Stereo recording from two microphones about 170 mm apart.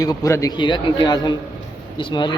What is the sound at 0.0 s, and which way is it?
A man's voice, 20° left (ahead or behind).